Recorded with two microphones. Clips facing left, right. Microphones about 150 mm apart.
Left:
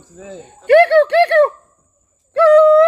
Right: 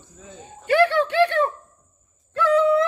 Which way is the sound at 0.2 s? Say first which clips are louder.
Left 8 dB; 70° left (ahead or behind).